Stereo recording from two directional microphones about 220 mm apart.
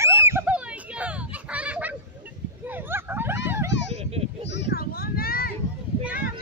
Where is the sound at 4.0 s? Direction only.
25° right (ahead or behind).